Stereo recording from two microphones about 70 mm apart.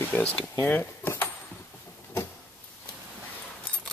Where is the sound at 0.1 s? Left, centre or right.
Centre.